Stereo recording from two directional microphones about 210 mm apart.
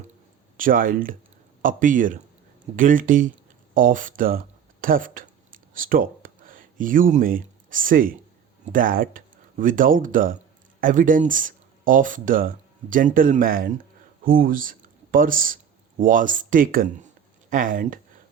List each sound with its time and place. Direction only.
0.5 s speech: 40° right (ahead or behind)